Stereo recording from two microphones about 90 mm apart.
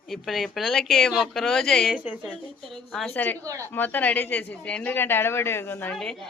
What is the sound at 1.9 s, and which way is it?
Speech, 15° right (ahead or behind).